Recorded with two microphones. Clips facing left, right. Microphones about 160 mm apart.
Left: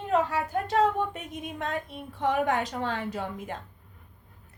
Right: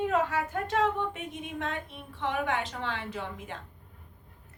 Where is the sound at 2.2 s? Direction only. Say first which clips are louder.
Left 5 dB; 40° left (ahead or behind).